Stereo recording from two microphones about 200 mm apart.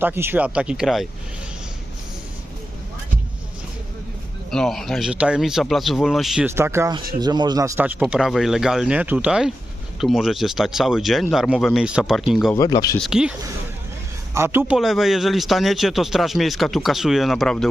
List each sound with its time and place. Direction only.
0.0 s speech: 10° right (ahead or behind)
4.5 s speech: centre (ahead or behind)
12.5 s speech: 20° left (ahead or behind)
13.0 s speech: 5° right (ahead or behind)
14.3 s speech: 10° right (ahead or behind)